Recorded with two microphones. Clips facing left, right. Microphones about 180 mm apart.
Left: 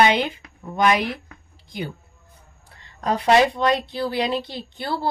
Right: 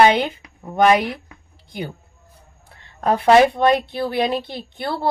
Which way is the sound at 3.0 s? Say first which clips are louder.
Right 4 dB; 55° right (ahead or behind).